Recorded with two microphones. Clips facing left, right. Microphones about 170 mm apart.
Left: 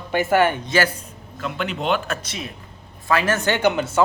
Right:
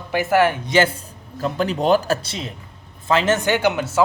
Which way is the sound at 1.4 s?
40° right (ahead or behind).